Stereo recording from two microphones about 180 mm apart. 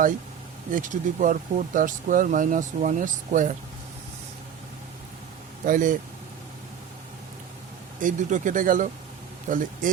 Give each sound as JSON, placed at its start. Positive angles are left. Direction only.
{"t": 0.7, "sound": "speech", "side_deg": -45}
{"t": 5.6, "sound": "speech", "side_deg": -50}
{"t": 8.0, "sound": "speech", "side_deg": -45}